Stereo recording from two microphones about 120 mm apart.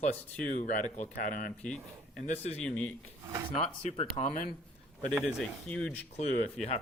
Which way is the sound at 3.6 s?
60° left (ahead or behind).